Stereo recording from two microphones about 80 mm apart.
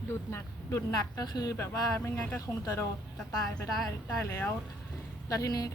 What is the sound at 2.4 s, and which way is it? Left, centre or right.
Speech, left.